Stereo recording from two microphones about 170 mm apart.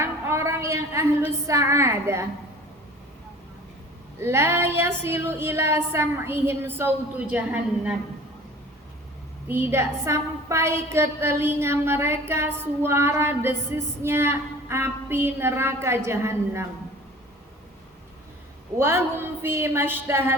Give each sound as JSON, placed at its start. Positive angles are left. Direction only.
{"t": 0.0, "sound": "a woman's voice", "side_deg": -15}
{"t": 4.2, "sound": "a woman's voice", "side_deg": -15}
{"t": 9.5, "sound": "a woman's voice", "side_deg": -10}
{"t": 18.8, "sound": "a woman's voice", "side_deg": -15}